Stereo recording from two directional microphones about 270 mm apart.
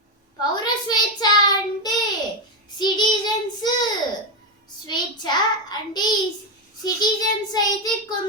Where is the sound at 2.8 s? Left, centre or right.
Centre.